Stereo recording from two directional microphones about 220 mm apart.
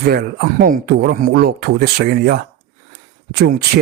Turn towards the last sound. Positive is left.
turn(degrees=-45)  # may be behind; listen again after turning